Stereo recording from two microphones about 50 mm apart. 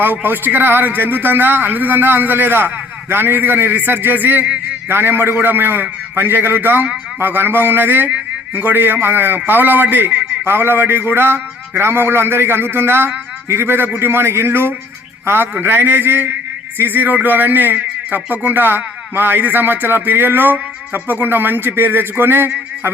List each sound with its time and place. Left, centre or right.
0.0 s a man's voice: right
10.4 s a man's voice: right